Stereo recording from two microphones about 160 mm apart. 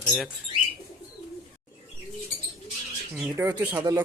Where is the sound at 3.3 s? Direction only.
20° right (ahead or behind).